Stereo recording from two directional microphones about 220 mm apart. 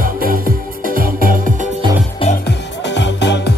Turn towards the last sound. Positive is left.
turn(degrees=55)  # may be behind; listen again after turning